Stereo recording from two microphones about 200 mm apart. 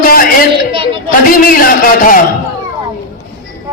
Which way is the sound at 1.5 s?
45° left (ahead or behind).